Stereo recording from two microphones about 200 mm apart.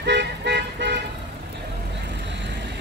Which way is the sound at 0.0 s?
60° right (ahead or behind).